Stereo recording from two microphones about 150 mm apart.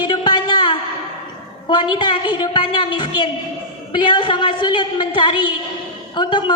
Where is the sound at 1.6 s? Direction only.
30° left (ahead or behind).